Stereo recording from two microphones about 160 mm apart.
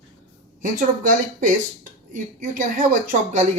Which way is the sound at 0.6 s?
55° right (ahead or behind).